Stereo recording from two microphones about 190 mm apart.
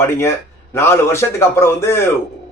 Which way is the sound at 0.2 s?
15° left (ahead or behind).